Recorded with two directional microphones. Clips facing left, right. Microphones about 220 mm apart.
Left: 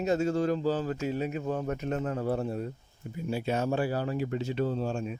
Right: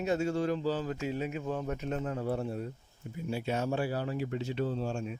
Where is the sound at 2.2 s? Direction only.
45° left (ahead or behind).